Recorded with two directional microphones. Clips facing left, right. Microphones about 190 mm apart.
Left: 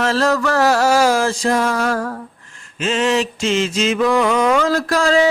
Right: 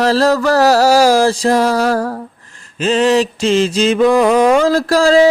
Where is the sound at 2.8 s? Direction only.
35° right (ahead or behind).